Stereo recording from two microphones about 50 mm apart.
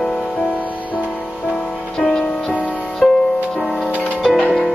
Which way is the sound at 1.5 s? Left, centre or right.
Centre.